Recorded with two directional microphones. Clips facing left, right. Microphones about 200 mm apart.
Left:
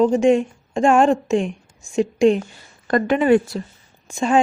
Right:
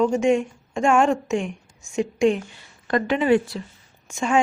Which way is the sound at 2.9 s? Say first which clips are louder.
Left 3 dB; 50° left (ahead or behind).